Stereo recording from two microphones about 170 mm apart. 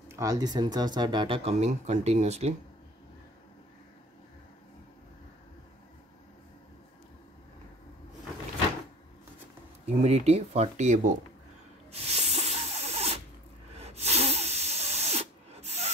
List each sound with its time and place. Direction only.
0.1 s speech: 20° right (ahead or behind); by 2.5 s 40° right (ahead or behind)
9.8 s speech: 40° right (ahead or behind)
11.9 s rub: 35° right (ahead or behind)
13.7 s sneeze: 40° right (ahead or behind)